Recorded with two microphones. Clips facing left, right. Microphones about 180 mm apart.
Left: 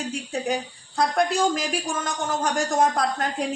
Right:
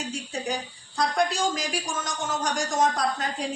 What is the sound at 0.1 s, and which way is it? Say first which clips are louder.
A woman's voice: left 4 dB; 60° left (ahead or behind).